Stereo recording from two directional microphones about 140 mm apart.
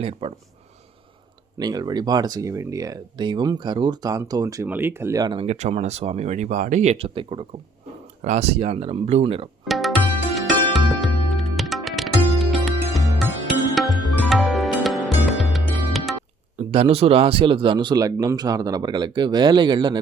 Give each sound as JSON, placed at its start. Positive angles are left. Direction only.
{"t": 0.0, "sound": "speech", "side_deg": -40}
{"t": 1.5, "sound": "speech", "side_deg": -30}
{"t": 5.2, "sound": "speech", "side_deg": -30}
{"t": 5.5, "sound": "speech", "side_deg": -55}
{"t": 8.2, "sound": "speech", "side_deg": -50}
{"t": 9.6, "sound": "music", "side_deg": 0}
{"t": 16.6, "sound": "speech", "side_deg": -45}